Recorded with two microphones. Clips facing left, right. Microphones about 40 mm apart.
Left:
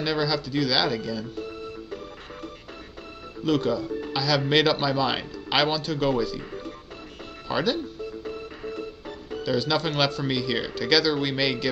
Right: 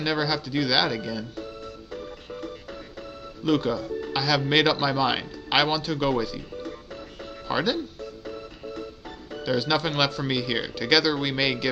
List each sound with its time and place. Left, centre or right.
0.0 s speech: centre
1.4 s organ: left
3.4 s speech: centre
7.4 s speech: centre
8.0 s music: left
9.4 s speech: centre